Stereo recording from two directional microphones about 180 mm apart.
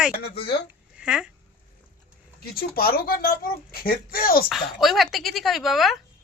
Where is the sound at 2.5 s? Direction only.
55° left (ahead or behind).